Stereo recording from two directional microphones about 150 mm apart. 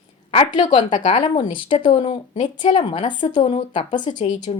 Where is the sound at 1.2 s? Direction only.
30° left (ahead or behind).